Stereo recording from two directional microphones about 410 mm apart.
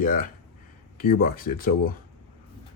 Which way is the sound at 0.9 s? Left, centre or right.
Left.